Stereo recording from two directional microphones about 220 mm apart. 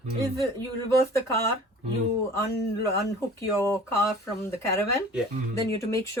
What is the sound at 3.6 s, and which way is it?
Speech, 10° left (ahead or behind).